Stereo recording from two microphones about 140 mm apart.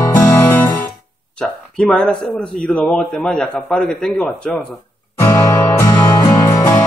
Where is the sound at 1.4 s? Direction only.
5° left (ahead or behind).